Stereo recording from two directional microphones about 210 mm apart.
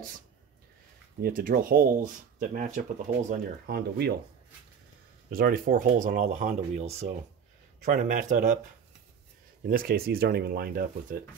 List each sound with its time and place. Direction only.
1.2 s speech: 40° right (ahead or behind)
3.3 s speech: 45° right (ahead or behind)
5.3 s speech: 45° right (ahead or behind)
9.7 s speech: 45° right (ahead or behind)